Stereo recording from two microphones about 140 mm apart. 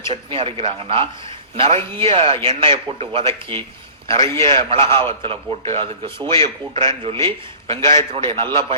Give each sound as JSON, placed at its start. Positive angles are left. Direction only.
{"t": 0.1, "sound": "a man's voice", "side_deg": -40}